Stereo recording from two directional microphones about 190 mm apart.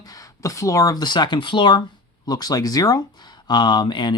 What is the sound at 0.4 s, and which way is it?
Speech, 15° left (ahead or behind).